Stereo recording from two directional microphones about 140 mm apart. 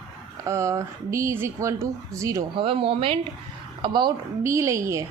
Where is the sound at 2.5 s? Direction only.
40° right (ahead or behind).